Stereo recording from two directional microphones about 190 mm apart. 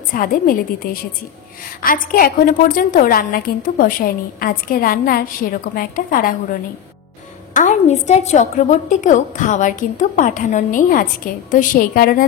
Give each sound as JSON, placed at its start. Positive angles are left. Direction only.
{"t": 0.1, "sound": "a woman's voice", "side_deg": 45}
{"t": 7.5, "sound": "a woman's voice", "side_deg": 40}